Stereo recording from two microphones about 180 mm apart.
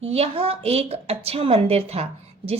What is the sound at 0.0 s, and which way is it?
A woman's voice, 35° right (ahead or behind).